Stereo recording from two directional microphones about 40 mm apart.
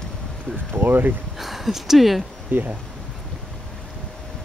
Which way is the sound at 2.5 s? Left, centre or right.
Right.